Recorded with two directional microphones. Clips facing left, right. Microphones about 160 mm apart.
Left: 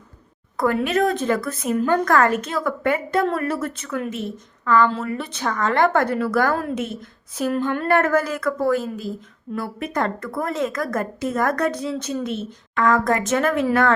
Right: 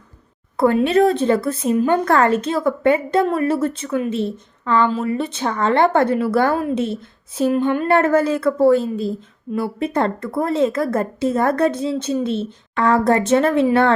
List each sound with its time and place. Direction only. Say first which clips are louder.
0.5 s a woman's voice: right 5 dB; 30° right (ahead or behind)
7.5 s a woman's voice: right 2 dB; 15° right (ahead or behind)